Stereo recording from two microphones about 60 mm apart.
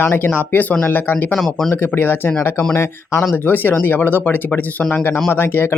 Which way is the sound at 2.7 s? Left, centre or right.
Left.